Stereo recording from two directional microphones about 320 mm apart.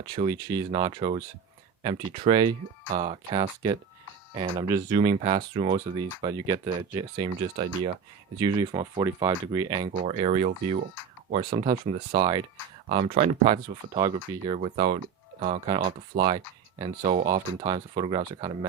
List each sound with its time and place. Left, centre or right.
0.2 s speech: centre
11.7 s speech: right
12.2 s speech: centre